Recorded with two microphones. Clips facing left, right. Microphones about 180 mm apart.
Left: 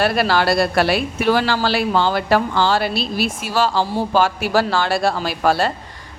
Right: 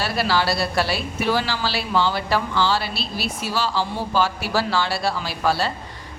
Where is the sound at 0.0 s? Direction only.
55° left (ahead or behind).